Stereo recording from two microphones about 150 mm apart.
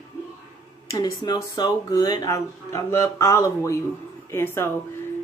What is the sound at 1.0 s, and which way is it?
A man's voice, 30° left (ahead or behind).